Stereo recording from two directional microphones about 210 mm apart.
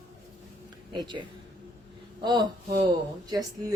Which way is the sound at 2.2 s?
20° right (ahead or behind).